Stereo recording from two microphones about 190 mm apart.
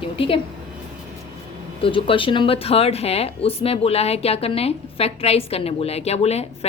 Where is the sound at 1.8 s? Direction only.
30° left (ahead or behind).